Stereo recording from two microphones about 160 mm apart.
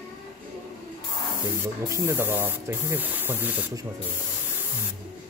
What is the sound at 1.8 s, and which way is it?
Speech, 15° right (ahead or behind).